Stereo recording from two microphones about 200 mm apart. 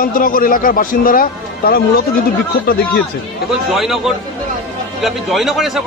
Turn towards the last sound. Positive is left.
turn(degrees=0)  # may be behind; listen again after turning